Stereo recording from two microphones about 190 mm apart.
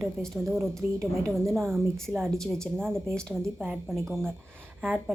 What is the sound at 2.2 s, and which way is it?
A woman's voice, centre (ahead or behind).